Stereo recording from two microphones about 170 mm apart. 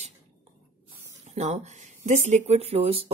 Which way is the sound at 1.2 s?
40° right (ahead or behind).